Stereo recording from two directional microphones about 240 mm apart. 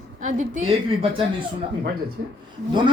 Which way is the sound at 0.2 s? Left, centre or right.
Right.